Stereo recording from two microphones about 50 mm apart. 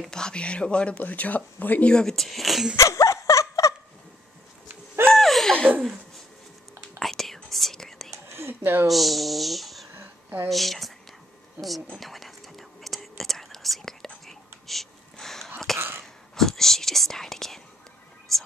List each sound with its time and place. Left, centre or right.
0.1 s speech: centre; by 1.9 s left
1.9 s speech: centre
2.1 s speech: centre
2.7 s laughter: left
5.0 s laughter: centre
5.5 s laughter: right
7.0 s whispering: centre
8.3 s a sound: right
8.8 s speech: centre
9.9 s a sound: right
10.5 s speech: centre
11.9 s whispering: centre